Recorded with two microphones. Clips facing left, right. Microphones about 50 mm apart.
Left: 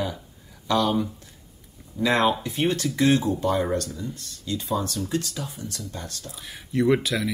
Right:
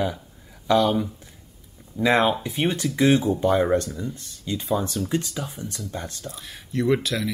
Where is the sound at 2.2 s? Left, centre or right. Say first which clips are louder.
Even; centre.